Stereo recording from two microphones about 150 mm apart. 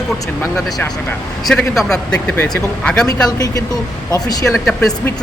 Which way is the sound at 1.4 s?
Centre (ahead or behind).